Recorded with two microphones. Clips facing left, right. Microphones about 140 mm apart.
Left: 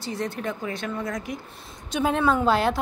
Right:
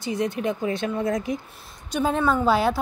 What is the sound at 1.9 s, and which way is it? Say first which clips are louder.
Speech: even; centre (ahead or behind).